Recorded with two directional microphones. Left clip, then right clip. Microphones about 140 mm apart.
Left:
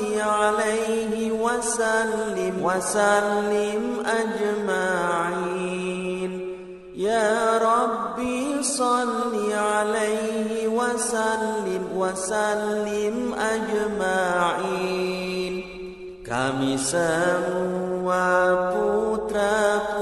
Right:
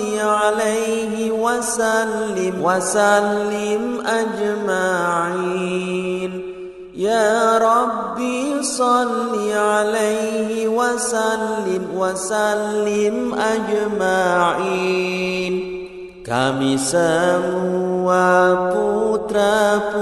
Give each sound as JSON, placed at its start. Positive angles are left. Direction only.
{"t": 0.2, "sound": "mantra", "side_deg": -40}
{"t": 4.6, "sound": "mantra", "side_deg": -40}
{"t": 7.1, "sound": "mantra", "side_deg": -40}
{"t": 9.6, "sound": "mantra", "side_deg": -40}
{"t": 16.3, "sound": "mantra", "side_deg": -40}